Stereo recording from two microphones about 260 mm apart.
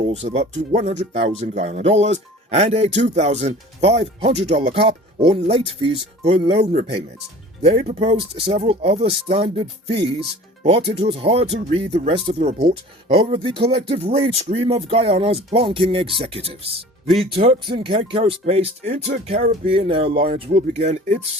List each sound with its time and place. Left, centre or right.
0.1 s speech: right